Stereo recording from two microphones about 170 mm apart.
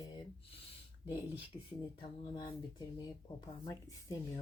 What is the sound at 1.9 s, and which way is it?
Speech, 30° left (ahead or behind).